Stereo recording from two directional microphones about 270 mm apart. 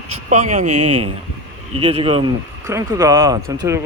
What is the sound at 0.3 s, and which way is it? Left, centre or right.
Speech, right.